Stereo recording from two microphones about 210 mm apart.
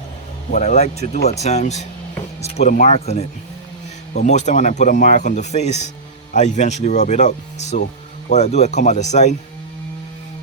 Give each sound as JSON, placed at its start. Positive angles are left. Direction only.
{"t": 0.5, "sound": "speech", "side_deg": 30}